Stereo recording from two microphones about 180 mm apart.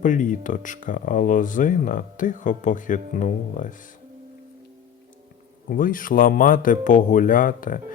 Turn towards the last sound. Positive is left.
turn(degrees=50)  # may be behind; listen again after turning